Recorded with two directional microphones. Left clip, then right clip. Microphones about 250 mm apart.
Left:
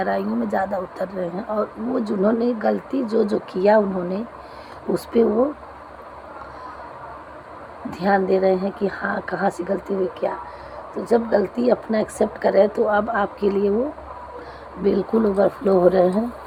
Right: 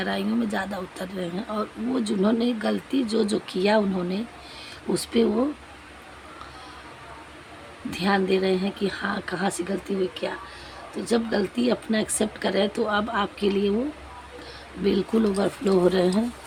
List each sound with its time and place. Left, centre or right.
0.0 s speech: right
7.9 s speech: right
10.9 s speech: right
14.8 s speech: right